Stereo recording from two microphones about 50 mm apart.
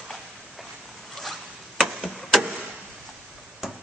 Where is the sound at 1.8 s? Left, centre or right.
Centre.